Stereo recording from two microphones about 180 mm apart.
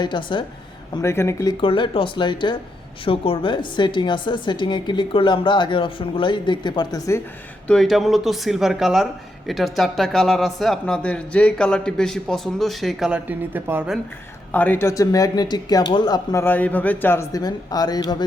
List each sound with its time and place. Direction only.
0.0 s a woman's voice: 25° left (ahead or behind)
1.0 s speech: 15° left (ahead or behind)
1.6 s a woman's voice: 30° left (ahead or behind)
7.7 s speech: centre (ahead or behind)
14.5 s a woman's voice: 10° left (ahead or behind)